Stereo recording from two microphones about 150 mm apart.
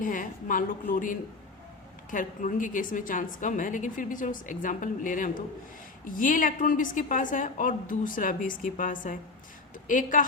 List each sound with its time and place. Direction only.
0.0 s a woman's voice: 65° left (ahead or behind)